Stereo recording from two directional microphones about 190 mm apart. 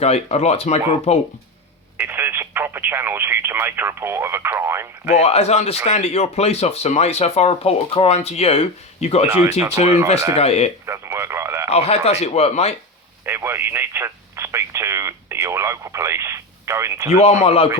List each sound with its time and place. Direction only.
0.0 s speech: 35° left (ahead or behind)
2.0 s speech: 10° right (ahead or behind)
5.0 s speech: 35° left (ahead or behind)
10.3 s speech: 35° left (ahead or behind)
10.8 s speech: 15° right (ahead or behind)
11.7 s speech: 35° left (ahead or behind)
13.2 s speech: 10° right (ahead or behind)
17.2 s speech: 35° left (ahead or behind)